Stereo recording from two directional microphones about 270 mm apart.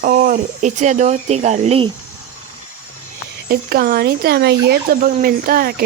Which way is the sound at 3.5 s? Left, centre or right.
Right.